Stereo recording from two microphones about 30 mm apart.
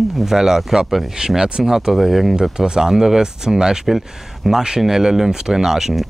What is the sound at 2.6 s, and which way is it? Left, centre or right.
Speech, right.